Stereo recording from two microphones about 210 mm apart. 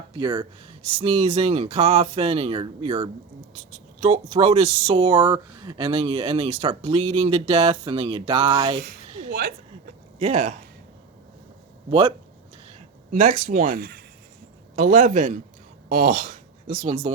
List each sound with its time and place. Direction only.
0.1 s speech: 20° right (ahead or behind)
10.2 s speech: 35° right (ahead or behind)
11.9 s speech: 25° right (ahead or behind)
13.1 s speech: 40° right (ahead or behind)